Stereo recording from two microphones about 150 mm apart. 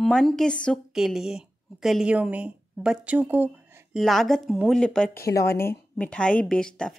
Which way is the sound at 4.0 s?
Centre (ahead or behind).